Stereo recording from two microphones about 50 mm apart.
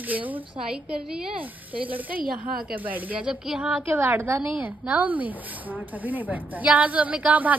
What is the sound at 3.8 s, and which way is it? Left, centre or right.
Speech, right.